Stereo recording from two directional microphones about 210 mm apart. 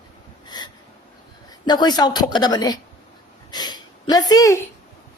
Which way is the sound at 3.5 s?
20° left (ahead or behind).